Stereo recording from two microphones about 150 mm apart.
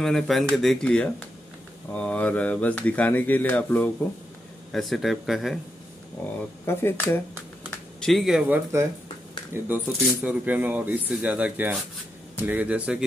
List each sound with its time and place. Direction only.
0.0 s speech: centre (ahead or behind)
6.2 s speech: 10° left (ahead or behind)
8.0 s speech: centre (ahead or behind)